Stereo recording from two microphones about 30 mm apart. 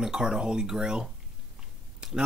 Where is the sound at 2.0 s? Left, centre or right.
Right.